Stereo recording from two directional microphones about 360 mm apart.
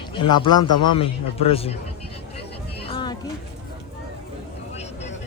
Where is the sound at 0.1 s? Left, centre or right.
Centre.